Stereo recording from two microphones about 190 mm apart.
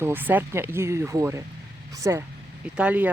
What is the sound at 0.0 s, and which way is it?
Speech, 10° right (ahead or behind).